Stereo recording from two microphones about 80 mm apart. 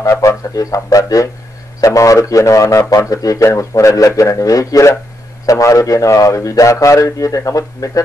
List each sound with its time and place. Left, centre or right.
0.0 s speech: left